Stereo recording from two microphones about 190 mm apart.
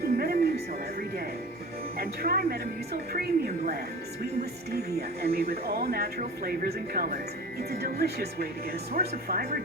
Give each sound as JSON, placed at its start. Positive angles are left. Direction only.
{"t": 0.0, "sound": "music", "side_deg": -55}
{"t": 2.0, "sound": "a woman's voice", "side_deg": -50}